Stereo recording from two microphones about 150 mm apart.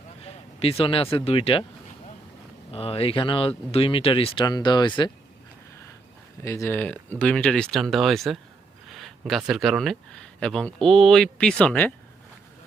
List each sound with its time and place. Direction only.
0.2 s a sound: 40° left (ahead or behind)
1.1 s speech: 40° left (ahead or behind)
2.7 s speech: 40° left (ahead or behind)
6.4 s speech: 20° left (ahead or behind)